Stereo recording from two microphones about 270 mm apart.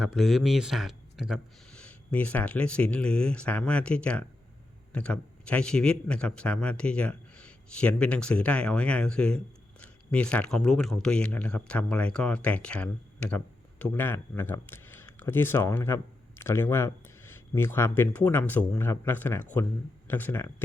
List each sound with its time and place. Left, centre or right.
0.0 s speech: centre